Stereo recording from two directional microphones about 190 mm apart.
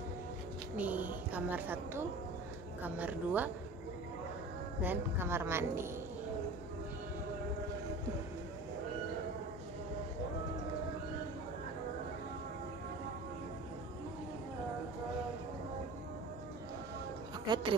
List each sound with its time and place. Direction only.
0.7 s a woman's voice: 10° right (ahead or behind)
4.8 s a woman's voice: 10° right (ahead or behind)
17.5 s a sound: 20° right (ahead or behind)